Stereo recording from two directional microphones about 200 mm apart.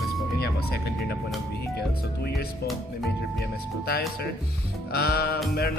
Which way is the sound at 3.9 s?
50° left (ahead or behind).